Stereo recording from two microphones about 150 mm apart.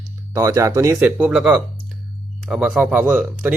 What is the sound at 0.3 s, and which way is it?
Speech, 20° right (ahead or behind).